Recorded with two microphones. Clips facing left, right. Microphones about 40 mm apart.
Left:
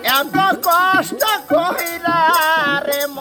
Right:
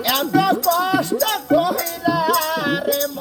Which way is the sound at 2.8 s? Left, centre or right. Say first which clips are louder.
Left 1 dB; left.